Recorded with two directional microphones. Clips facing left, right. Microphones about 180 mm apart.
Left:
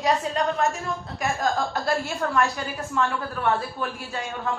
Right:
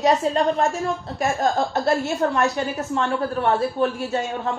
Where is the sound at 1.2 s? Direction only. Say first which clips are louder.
Right 4 dB; 25° right (ahead or behind).